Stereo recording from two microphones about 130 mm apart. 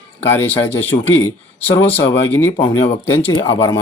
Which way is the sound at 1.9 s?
15° left (ahead or behind).